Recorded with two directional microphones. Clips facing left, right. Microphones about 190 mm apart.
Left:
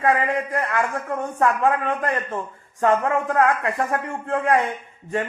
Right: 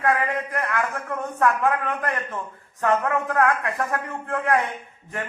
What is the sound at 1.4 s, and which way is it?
Speech, 20° left (ahead or behind).